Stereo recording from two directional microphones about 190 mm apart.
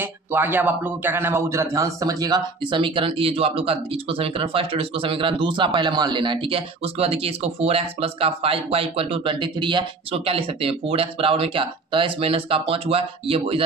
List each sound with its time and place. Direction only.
0.0 s speech: 10° right (ahead or behind); by 13.7 s 30° right (ahead or behind)